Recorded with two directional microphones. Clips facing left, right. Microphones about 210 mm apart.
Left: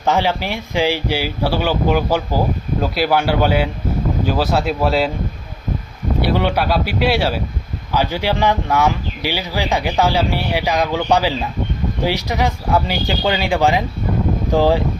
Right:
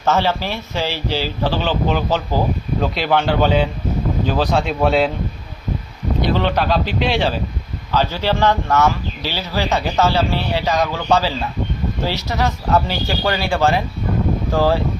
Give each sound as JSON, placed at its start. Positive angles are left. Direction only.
{"t": 0.0, "sound": "speech", "side_deg": 15}
{"t": 6.2, "sound": "speech", "side_deg": 10}